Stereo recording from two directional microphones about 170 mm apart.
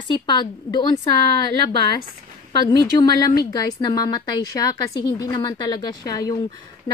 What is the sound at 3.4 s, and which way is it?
A woman's voice, 20° left (ahead or behind).